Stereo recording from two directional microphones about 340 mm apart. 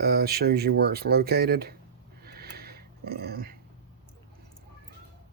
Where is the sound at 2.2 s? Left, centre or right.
Right.